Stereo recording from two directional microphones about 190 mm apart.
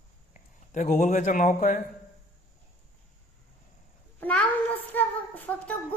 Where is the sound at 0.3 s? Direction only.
40° left (ahead or behind).